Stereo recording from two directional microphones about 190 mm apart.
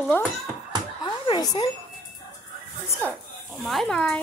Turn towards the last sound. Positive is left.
turn(degrees=5)  # may be behind; listen again after turning